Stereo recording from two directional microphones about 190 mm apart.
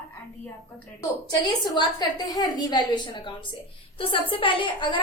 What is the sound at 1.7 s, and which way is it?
A woman's voice, 20° left (ahead or behind).